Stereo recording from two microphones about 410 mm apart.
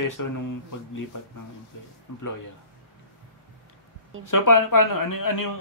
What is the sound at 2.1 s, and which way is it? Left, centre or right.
Speech, left.